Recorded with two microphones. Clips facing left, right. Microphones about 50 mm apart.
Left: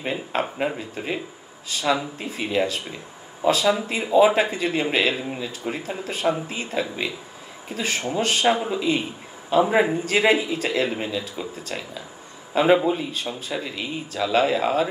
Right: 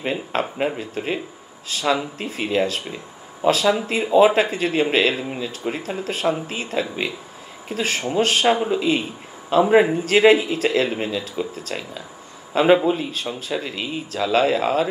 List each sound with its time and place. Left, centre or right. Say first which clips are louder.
0.0 s speech: right 2 dB; right
8.6 s speech: right 3 dB; right
10.0 s speech: right 5 dB; right
12.5 s speech: right 2 dB; right
14.1 s speech: right 2 dB; right